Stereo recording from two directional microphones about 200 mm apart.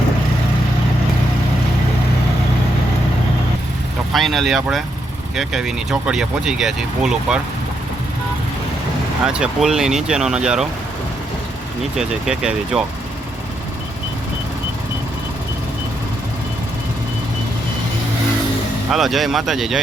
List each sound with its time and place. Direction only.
4.1 s speech: centre (ahead or behind)
9.2 s speech: 5° right (ahead or behind)
11.9 s speech: 5° right (ahead or behind)
18.9 s speech: centre (ahead or behind)